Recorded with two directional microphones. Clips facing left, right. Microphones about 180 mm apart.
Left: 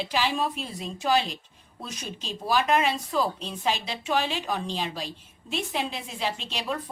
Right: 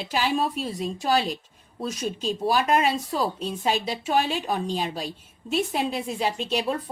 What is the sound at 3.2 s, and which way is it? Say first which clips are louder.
Speech: right 1 dB; centre (ahead or behind).